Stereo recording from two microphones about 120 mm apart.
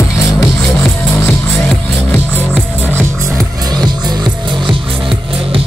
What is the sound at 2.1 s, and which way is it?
Music, 15° left (ahead or behind).